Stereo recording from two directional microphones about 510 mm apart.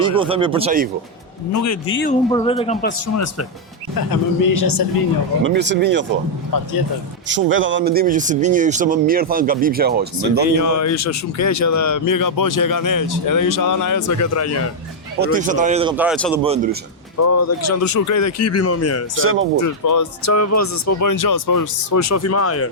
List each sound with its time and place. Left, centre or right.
0.0 s speech: centre
1.5 s a man's voice: left
2.3 s speech: centre
4.5 s speech: left
5.4 s speech: right
7.3 s speech: right
10.6 s speech: left
15.2 s speech: centre
17.2 s speech: left
19.2 s speech: right
19.5 s speech: left